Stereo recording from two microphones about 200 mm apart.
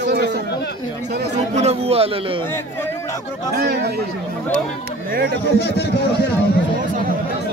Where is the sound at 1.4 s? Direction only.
35° right (ahead or behind).